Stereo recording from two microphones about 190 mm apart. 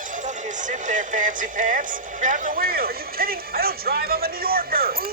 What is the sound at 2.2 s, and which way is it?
Speech, 40° right (ahead or behind).